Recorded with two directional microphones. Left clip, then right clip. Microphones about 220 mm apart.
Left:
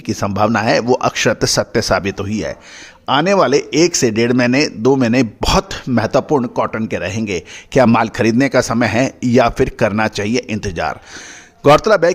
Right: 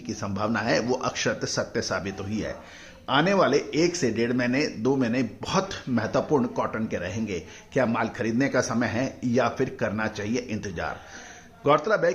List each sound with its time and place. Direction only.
0.0 s speech: 50° left (ahead or behind)